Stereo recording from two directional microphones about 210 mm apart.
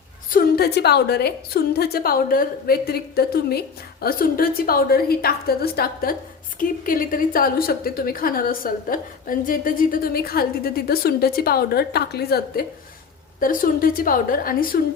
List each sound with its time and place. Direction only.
0.3 s a woman's voice: 45° left (ahead or behind)